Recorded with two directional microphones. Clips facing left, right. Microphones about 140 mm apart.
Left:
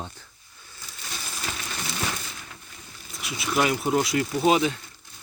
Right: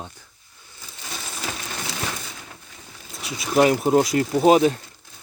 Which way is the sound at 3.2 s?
35° right (ahead or behind).